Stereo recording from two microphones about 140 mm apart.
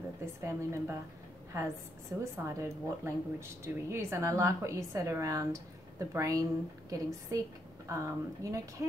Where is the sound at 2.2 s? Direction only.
20° right (ahead or behind).